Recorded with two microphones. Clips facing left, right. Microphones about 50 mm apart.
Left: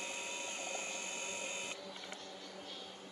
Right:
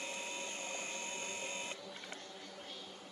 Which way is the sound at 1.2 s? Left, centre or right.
Left.